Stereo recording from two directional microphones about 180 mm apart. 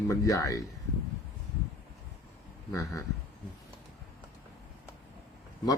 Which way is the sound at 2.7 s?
15° left (ahead or behind).